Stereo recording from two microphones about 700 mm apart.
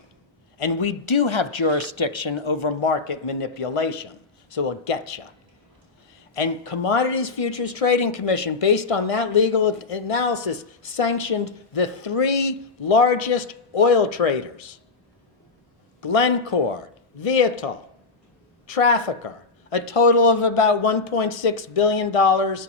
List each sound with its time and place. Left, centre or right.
0.6 s speech: left
6.3 s speech: left
16.0 s speech: left